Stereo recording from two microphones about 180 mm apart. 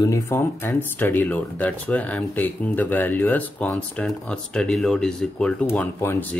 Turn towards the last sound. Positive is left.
turn(degrees=10)  # may be behind; listen again after turning